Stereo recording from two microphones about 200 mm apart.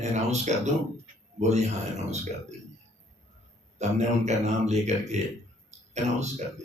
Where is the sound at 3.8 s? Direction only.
35° right (ahead or behind).